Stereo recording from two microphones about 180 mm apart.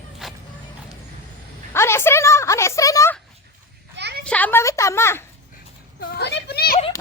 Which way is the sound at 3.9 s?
70° right (ahead or behind).